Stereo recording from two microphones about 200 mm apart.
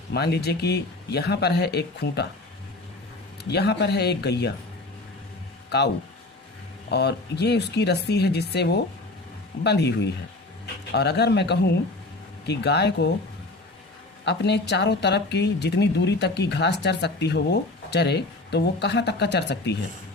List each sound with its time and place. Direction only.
0.1 s speech: 55° left (ahead or behind)
3.5 s speech: 55° left (ahead or behind)
6.9 s speech: 55° left (ahead or behind)
14.3 s speech: 55° left (ahead or behind)